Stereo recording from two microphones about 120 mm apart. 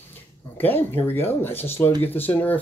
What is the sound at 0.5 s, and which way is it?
Speech, 15° left (ahead or behind).